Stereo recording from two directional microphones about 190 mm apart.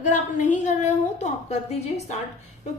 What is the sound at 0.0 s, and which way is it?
A woman's voice, 40° left (ahead or behind).